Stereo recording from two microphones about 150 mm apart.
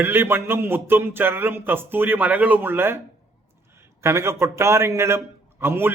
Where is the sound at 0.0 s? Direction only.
15° right (ahead or behind).